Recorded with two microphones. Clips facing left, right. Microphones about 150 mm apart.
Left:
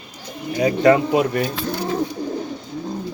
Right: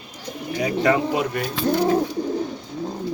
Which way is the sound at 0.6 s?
35° left (ahead or behind).